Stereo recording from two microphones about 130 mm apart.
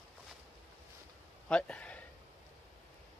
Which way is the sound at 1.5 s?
10° left (ahead or behind).